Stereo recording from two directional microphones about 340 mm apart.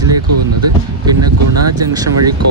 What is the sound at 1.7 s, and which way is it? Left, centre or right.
Speech, centre.